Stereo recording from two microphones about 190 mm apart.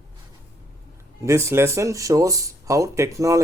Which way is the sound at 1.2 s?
15° right (ahead or behind).